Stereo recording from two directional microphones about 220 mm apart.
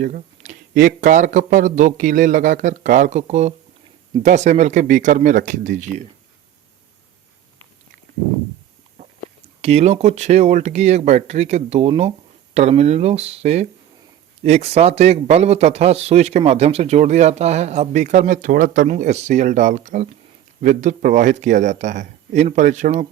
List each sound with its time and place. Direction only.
0.0 s speech: 35° right (ahead or behind)
9.6 s a man's voice: 30° right (ahead or behind)